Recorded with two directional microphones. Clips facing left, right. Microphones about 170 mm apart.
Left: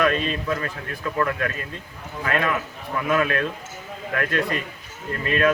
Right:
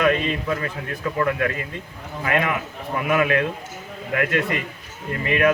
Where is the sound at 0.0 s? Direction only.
15° right (ahead or behind).